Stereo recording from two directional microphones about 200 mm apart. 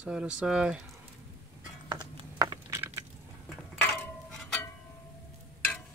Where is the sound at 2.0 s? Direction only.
20° right (ahead or behind).